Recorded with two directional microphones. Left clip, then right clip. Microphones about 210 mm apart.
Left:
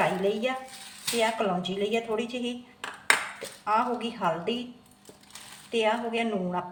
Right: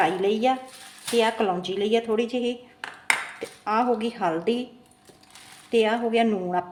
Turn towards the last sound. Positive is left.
turn(degrees=-55)  # may be behind; listen again after turning